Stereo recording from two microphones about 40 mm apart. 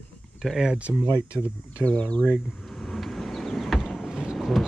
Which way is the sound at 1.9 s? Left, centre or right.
Left.